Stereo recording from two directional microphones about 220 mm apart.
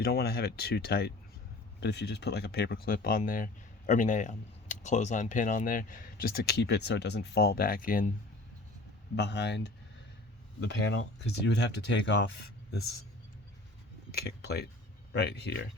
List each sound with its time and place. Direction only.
0.0 s speech: 45° left (ahead or behind)
9.1 s speech: 50° left (ahead or behind)
14.4 s speech: 50° left (ahead or behind)